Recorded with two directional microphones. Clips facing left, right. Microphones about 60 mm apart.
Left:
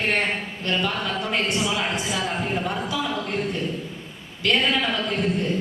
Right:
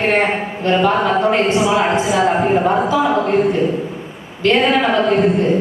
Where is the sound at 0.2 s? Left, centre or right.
Right.